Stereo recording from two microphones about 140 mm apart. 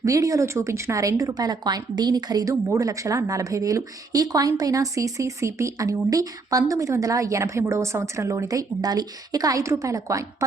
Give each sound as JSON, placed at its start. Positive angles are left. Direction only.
{"t": 0.0, "sound": "speech", "side_deg": -25}